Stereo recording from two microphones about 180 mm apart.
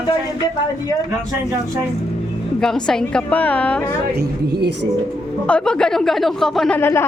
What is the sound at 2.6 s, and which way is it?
Speech, 5° left (ahead or behind).